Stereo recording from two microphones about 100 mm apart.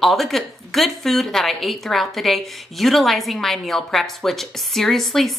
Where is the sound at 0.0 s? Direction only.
Centre (ahead or behind).